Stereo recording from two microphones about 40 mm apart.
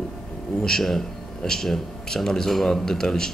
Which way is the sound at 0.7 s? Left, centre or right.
Centre.